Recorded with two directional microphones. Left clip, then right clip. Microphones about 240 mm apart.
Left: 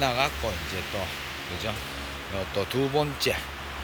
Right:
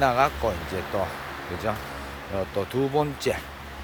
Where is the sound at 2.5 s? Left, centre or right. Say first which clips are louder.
Right 1 dB; centre.